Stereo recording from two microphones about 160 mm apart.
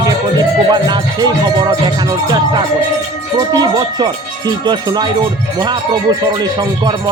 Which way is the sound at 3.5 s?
25° right (ahead or behind).